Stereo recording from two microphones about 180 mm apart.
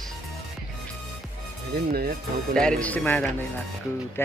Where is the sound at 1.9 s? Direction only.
55° right (ahead or behind).